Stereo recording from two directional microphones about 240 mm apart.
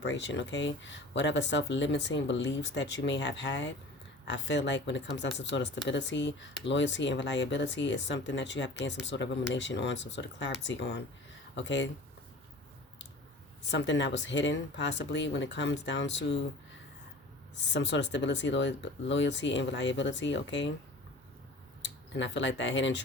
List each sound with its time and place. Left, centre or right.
0.0 s speech: left
13.7 s speech: left
17.7 s speech: left
21.8 s speech: left